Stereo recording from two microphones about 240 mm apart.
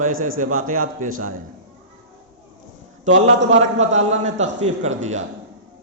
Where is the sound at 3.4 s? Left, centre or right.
Right.